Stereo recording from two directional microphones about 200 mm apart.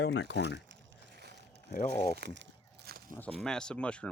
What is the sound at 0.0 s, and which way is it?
Speech, 60° left (ahead or behind).